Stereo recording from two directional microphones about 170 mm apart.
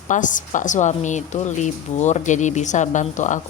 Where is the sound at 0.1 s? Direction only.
50° left (ahead or behind).